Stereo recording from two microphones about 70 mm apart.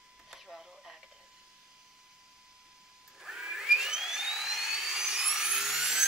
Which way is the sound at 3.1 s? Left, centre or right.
Centre.